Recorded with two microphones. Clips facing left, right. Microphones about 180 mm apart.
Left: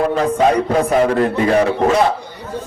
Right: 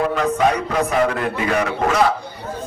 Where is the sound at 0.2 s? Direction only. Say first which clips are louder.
Left 4 dB; 30° left (ahead or behind).